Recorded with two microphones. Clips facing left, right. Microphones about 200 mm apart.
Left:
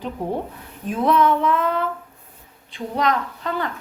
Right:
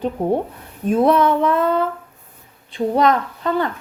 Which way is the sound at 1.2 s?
35° right (ahead or behind).